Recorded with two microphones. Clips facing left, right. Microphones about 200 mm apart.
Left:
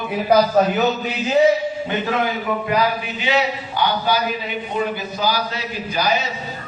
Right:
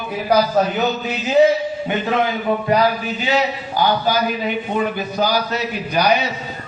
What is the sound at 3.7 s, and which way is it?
Speech, 40° right (ahead or behind).